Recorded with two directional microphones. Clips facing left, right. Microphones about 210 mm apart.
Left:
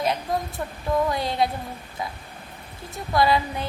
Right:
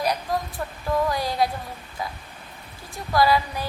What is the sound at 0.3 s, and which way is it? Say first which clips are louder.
Speech: even; 25° left (ahead or behind).